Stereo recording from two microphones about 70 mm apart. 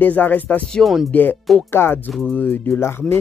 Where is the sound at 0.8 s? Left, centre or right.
Centre.